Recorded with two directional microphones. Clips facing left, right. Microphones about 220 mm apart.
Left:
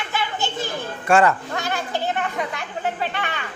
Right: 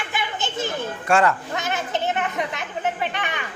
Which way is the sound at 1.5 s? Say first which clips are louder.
Even; 20° right (ahead or behind).